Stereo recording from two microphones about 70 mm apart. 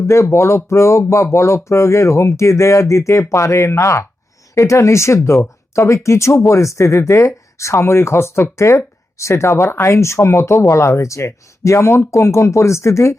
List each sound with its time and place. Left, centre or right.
0.1 s speech: left